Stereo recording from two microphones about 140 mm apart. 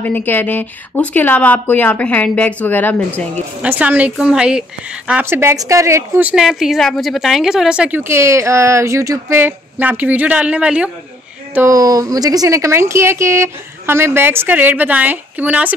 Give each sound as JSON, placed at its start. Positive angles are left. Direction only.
{"t": 0.0, "sound": "speech", "side_deg": 15}
{"t": 3.6, "sound": "a woman's voice", "side_deg": -10}
{"t": 11.5, "sound": "a woman's voice", "side_deg": -20}